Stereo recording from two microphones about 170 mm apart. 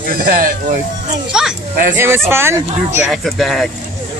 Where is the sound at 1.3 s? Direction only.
5° right (ahead or behind).